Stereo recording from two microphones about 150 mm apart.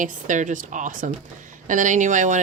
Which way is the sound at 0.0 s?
60° right (ahead or behind).